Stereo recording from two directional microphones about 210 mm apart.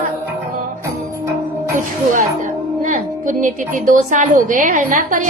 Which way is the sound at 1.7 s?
40° right (ahead or behind).